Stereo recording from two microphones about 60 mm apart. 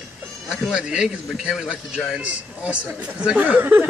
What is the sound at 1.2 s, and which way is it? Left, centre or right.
Speech, centre.